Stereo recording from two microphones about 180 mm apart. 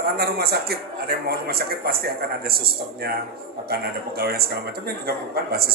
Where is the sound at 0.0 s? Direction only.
60° right (ahead or behind).